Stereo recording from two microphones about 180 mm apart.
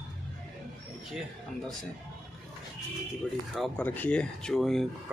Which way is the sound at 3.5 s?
5° left (ahead or behind).